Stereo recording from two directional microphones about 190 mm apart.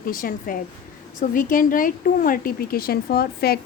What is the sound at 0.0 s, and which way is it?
Speech, 50° left (ahead or behind).